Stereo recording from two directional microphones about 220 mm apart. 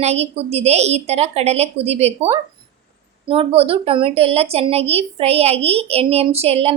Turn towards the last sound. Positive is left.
turn(degrees=-25)  # may be behind; listen again after turning